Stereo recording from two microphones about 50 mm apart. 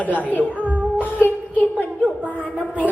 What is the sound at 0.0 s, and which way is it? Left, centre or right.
Speech, left.